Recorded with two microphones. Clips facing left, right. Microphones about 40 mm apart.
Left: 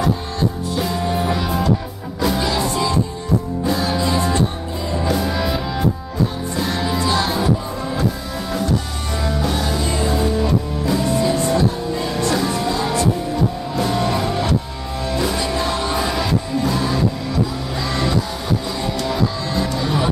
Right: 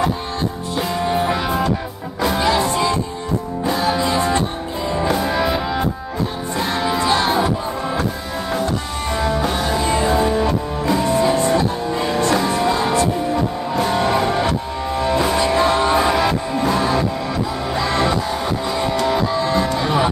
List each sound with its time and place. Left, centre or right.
0.7 s music: centre
9.1 s music: centre